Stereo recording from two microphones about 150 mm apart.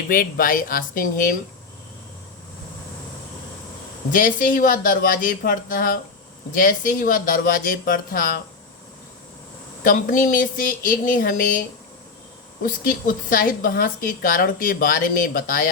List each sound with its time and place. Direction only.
0.1 s a woman's voice: 70° left (ahead or behind)
4.1 s a woman's voice: 65° left (ahead or behind)
9.8 s speech: 65° left (ahead or behind)
12.6 s a woman's voice: 65° left (ahead or behind)